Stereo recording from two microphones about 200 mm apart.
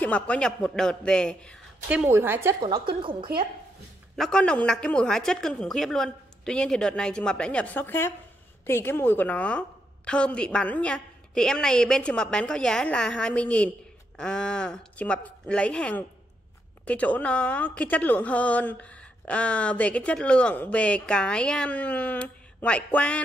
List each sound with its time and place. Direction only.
0.0 s a woman's voice: 5° left (ahead or behind)
1.9 s a woman's voice: 10° right (ahead or behind)
2.7 s a woman's voice: 25° right (ahead or behind)
4.2 s a woman's voice: 5° left (ahead or behind)